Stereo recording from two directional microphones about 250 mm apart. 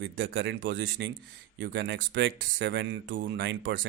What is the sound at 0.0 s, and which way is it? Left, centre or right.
Speech, right.